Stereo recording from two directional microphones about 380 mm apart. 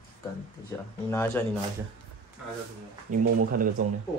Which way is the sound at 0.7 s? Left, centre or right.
Centre.